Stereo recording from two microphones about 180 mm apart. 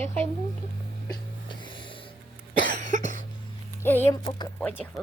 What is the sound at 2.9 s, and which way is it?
Cough, 45° right (ahead or behind).